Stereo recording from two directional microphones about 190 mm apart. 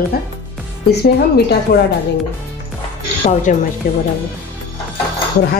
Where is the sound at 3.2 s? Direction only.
35° left (ahead or behind).